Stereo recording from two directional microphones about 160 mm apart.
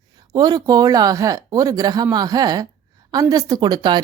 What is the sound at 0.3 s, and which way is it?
Speech, 25° right (ahead or behind).